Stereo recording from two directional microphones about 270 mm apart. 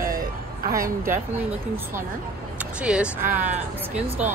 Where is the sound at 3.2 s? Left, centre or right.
Right.